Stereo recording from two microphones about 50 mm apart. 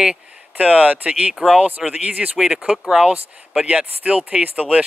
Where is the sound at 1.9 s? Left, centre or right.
Right.